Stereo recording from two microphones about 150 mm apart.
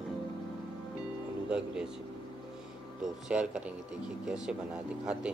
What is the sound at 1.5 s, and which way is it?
Speech, 5° right (ahead or behind).